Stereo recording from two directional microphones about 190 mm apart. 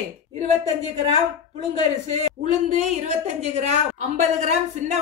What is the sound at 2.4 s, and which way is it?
A woman's voice, 40° right (ahead or behind).